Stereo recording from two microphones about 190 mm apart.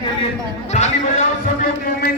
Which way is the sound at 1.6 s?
50° left (ahead or behind).